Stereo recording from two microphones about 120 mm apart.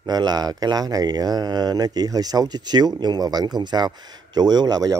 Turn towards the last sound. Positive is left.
turn(degrees=-35)  # may be behind; listen again after turning